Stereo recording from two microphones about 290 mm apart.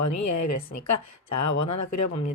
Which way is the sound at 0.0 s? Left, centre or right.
Left.